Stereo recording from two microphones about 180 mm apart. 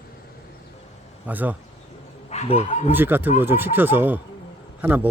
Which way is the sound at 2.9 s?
10° right (ahead or behind).